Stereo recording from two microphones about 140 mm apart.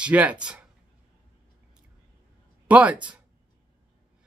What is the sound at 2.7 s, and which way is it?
Speech, 10° right (ahead or behind).